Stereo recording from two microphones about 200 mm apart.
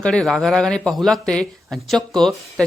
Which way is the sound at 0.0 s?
Centre (ahead or behind).